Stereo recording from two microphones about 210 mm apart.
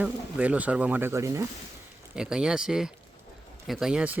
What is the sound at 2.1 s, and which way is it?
Speech, 5° right (ahead or behind).